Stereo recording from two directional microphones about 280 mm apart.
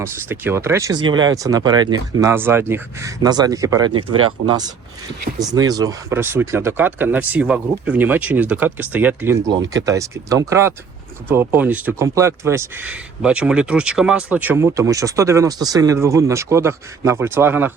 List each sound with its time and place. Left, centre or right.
0.0 s speech: centre
4.1 s speech: right
5.4 s speech: centre